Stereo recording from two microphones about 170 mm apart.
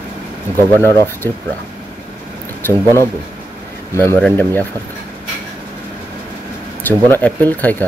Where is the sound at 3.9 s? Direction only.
15° left (ahead or behind).